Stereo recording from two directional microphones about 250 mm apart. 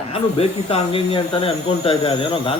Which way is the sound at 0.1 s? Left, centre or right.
Left.